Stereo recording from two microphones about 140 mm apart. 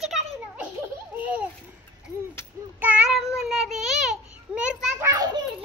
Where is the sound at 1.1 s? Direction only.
10° right (ahead or behind).